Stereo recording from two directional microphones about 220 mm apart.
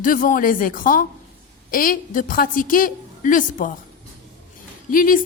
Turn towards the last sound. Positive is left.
turn(degrees=40)  # may be behind; listen again after turning